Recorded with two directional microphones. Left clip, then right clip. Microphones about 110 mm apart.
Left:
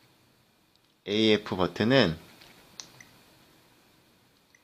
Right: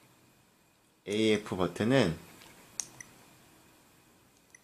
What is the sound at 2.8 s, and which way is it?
Clicking, 10° right (ahead or behind).